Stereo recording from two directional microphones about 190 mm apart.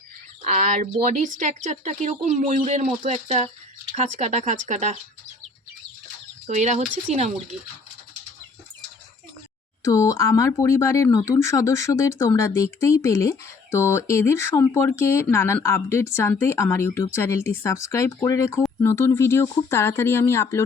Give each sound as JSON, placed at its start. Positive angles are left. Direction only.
{"t": 0.4, "sound": "speech", "side_deg": -40}
{"t": 6.5, "sound": "speech", "side_deg": -40}
{"t": 9.8, "sound": "speech", "side_deg": 15}